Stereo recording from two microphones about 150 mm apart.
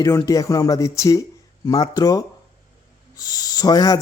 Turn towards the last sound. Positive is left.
turn(degrees=25)  # may be behind; listen again after turning